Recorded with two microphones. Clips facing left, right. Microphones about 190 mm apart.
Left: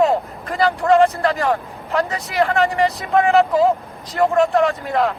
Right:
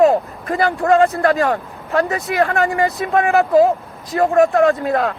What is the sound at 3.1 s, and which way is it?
Speech, 55° right (ahead or behind).